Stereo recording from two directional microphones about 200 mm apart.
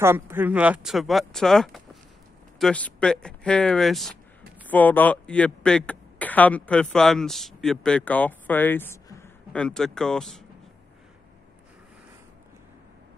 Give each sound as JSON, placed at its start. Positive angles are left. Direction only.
{"t": 0.0, "sound": "speech", "side_deg": -10}